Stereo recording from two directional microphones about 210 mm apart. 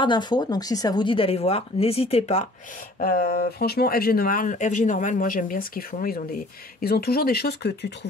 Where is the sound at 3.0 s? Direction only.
45° left (ahead or behind).